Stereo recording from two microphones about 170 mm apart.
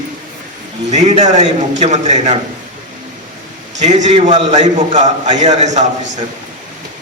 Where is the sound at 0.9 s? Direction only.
40° right (ahead or behind).